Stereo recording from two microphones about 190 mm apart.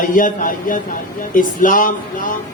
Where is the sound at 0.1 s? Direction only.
45° left (ahead or behind).